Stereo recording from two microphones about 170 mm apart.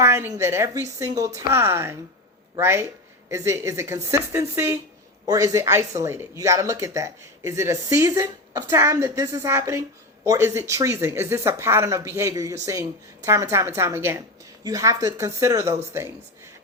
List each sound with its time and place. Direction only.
0.0 s a woman's voice: 15° right (ahead or behind)